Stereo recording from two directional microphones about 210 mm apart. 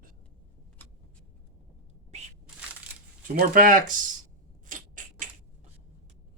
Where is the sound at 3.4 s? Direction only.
40° right (ahead or behind).